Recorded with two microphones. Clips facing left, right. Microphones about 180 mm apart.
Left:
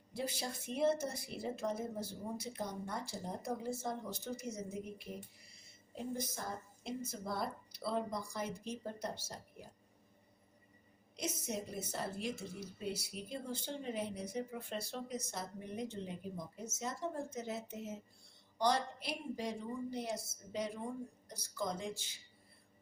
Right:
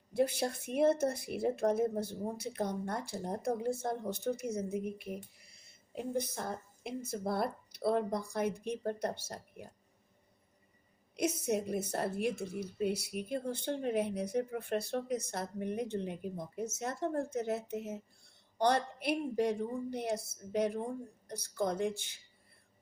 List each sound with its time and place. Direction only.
0.1 s a woman's voice: 55° right (ahead or behind)
11.2 s a woman's voice: 60° right (ahead or behind)